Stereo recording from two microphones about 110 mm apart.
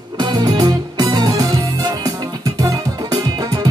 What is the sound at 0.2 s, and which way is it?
Music, 40° right (ahead or behind).